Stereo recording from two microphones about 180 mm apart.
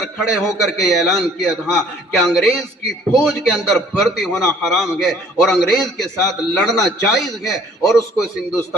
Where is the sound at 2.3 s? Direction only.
Centre (ahead or behind).